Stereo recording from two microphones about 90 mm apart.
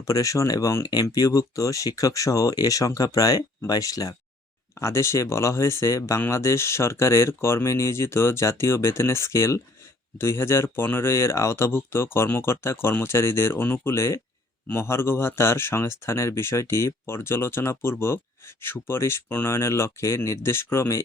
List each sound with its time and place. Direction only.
0.0 s speech: 35° left (ahead or behind)